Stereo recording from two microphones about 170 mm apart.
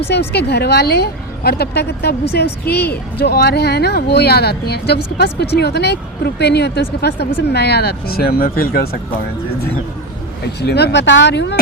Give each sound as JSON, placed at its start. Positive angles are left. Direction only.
{"t": 0.1, "sound": "a woman's voice", "side_deg": 75}
{"t": 10.6, "sound": "speech", "side_deg": 75}